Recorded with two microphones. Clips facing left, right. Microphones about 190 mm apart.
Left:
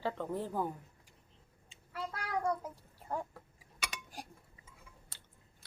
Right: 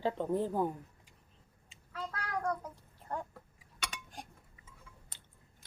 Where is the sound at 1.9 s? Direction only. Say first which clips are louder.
Left 1 dB; 10° left (ahead or behind).